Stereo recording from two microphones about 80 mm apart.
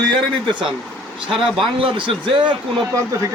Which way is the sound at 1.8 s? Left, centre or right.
Right.